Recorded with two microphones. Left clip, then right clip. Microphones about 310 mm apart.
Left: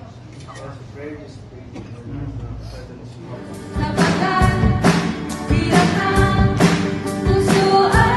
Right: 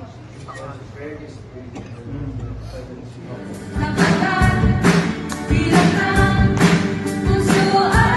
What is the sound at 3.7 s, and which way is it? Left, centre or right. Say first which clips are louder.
Music: even; left.